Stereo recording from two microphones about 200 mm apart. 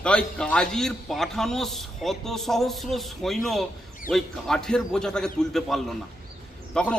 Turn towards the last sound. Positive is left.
turn(degrees=5)  # may be behind; listen again after turning